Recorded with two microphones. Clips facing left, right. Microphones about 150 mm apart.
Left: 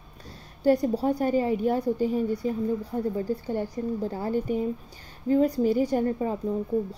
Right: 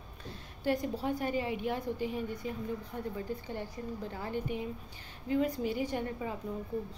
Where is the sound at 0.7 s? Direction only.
40° left (ahead or behind).